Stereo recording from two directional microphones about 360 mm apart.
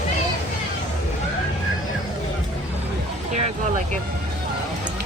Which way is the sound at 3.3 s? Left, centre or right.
Centre.